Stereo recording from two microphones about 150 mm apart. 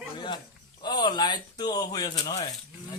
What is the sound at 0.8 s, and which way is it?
Speech, 30° left (ahead or behind).